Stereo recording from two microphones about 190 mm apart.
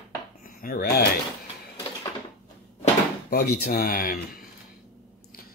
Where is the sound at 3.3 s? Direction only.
55° left (ahead or behind).